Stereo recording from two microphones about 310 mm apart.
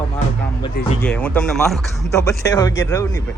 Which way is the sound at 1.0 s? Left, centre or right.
Centre.